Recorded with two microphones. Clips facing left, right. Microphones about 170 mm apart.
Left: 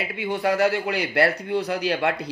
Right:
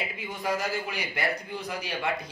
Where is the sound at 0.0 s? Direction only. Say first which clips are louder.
Left 8 dB; 70° left (ahead or behind).